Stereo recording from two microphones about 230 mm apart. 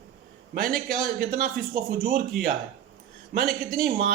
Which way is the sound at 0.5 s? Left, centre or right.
Right.